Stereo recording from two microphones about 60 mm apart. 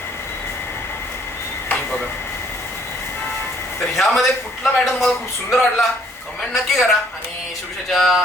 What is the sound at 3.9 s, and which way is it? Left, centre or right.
A man's voice, centre.